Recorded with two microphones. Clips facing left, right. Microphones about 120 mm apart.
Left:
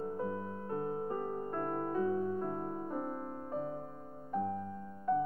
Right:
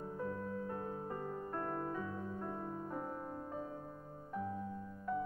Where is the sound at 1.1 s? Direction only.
40° left (ahead or behind).